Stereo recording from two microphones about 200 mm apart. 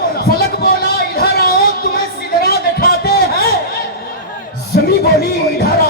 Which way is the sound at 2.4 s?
50° left (ahead or behind).